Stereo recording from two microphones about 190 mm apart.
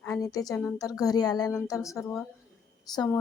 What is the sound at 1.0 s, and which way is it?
Speech, 20° left (ahead or behind).